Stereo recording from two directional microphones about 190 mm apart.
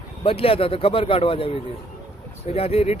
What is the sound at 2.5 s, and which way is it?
Speech, 30° left (ahead or behind).